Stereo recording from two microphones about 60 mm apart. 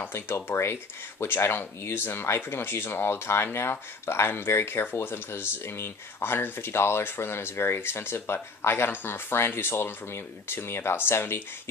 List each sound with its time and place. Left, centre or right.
0.0 s speech: left